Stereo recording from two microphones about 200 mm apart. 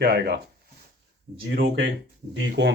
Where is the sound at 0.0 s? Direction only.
55° right (ahead or behind).